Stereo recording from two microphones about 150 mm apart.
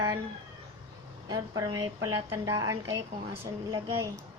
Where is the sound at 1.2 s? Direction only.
25° right (ahead or behind).